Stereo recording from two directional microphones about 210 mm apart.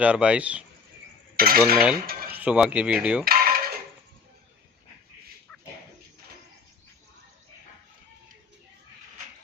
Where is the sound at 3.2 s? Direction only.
45° right (ahead or behind).